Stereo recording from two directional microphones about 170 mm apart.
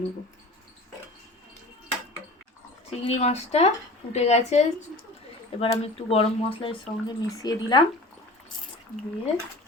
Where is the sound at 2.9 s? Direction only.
40° left (ahead or behind); by 7.8 s 25° left (ahead or behind).